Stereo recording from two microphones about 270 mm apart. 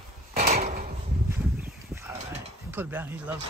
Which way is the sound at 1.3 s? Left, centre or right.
Centre.